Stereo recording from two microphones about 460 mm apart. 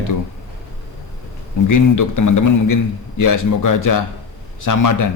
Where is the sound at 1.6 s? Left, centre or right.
Left.